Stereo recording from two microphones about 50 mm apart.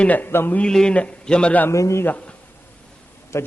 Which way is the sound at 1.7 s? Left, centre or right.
Left.